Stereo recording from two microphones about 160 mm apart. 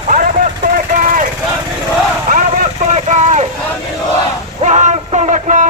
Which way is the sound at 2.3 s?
50° right (ahead or behind).